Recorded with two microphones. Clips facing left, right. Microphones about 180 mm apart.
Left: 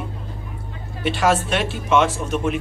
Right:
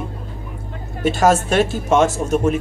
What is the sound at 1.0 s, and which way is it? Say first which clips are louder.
Speech: right 4 dB; 45° right (ahead or behind).